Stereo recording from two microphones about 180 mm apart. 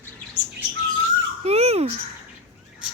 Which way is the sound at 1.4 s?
35° right (ahead or behind).